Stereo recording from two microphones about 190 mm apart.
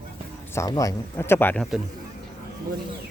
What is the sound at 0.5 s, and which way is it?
Speech, 20° left (ahead or behind).